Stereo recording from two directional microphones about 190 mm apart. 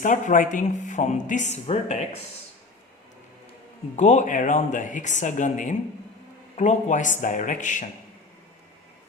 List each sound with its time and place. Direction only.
0.0 s speech: 45° left (ahead or behind)
3.9 s speech: 40° left (ahead or behind)